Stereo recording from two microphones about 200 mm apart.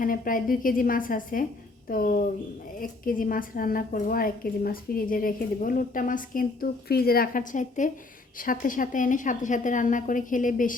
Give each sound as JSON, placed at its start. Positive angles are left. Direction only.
{"t": 0.0, "sound": "a woman's voice", "side_deg": 45}